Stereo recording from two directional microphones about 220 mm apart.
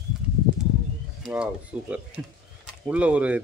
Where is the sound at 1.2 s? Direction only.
5° right (ahead or behind).